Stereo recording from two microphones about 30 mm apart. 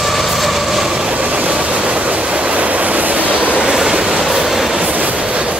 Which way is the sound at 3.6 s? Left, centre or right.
Right.